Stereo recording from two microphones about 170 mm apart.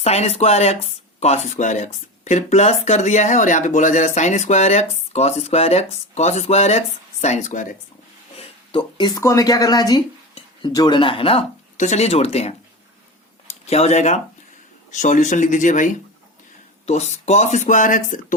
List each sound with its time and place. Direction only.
0.0 s speech: 40° left (ahead or behind)
8.4 s speech: 30° left (ahead or behind)
13.7 s speech: 40° left (ahead or behind)